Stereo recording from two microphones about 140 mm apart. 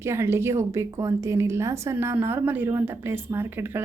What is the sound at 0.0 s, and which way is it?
A woman's voice, 20° right (ahead or behind).